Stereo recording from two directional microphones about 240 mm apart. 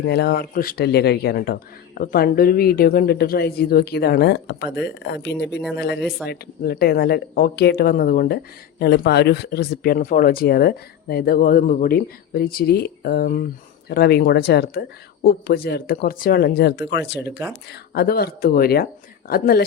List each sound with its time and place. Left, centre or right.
0.0 s speech: left